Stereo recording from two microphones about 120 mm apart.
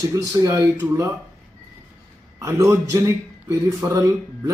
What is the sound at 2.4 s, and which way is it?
A man's voice, 25° right (ahead or behind).